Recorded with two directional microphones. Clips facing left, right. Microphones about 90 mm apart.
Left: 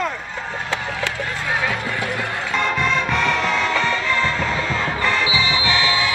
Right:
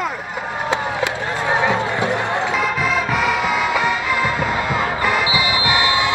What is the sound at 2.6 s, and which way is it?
Music, 5° right (ahead or behind).